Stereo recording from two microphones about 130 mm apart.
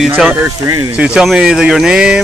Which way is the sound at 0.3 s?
15° right (ahead or behind).